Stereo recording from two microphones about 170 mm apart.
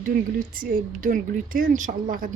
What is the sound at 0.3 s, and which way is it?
Speech, 55° right (ahead or behind).